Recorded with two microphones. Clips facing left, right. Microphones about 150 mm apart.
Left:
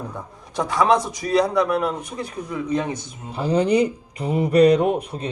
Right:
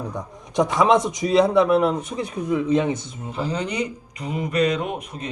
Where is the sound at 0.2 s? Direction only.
20° right (ahead or behind).